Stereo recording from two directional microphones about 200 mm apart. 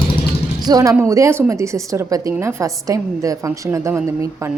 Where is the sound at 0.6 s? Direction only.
20° right (ahead or behind).